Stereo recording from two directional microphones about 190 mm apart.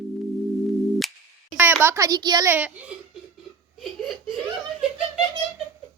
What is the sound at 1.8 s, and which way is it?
Speech, 15° right (ahead or behind).